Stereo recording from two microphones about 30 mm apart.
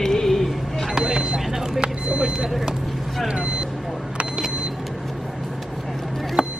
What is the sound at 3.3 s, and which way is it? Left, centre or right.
Vehicle, right.